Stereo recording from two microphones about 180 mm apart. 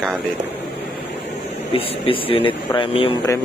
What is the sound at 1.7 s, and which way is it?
Speech, 30° left (ahead or behind).